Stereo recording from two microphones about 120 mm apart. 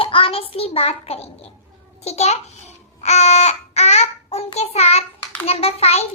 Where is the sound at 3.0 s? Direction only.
65° left (ahead or behind).